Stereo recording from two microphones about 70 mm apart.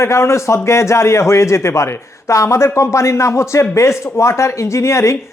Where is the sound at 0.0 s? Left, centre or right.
Left.